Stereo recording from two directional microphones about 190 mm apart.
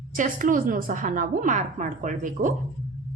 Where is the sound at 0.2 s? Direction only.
45° right (ahead or behind).